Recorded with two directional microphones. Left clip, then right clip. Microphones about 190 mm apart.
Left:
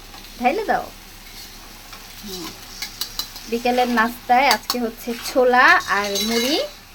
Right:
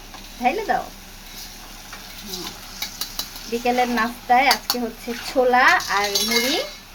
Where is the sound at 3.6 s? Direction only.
30° left (ahead or behind).